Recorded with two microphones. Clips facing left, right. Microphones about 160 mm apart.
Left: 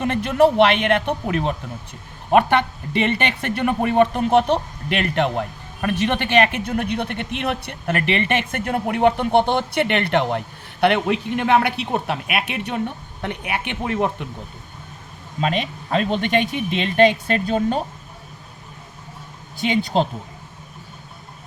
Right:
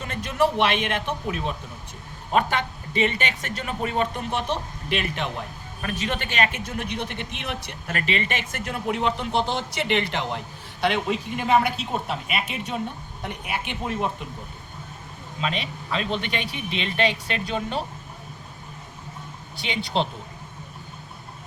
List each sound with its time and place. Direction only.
0.0 s speech: 60° left (ahead or behind)
15.4 s speech: 50° left (ahead or behind)
19.5 s speech: 45° left (ahead or behind)